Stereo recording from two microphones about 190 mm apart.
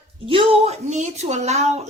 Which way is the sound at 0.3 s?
30° right (ahead or behind).